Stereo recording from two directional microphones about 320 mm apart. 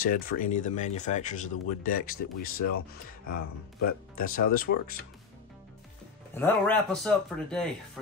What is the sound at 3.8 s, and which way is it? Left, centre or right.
Speech, left.